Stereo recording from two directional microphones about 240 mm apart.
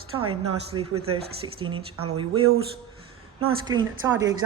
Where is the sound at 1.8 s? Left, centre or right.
Right.